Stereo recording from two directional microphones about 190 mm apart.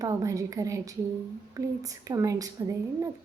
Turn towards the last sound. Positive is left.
turn(degrees=-20)  # may be behind; listen again after turning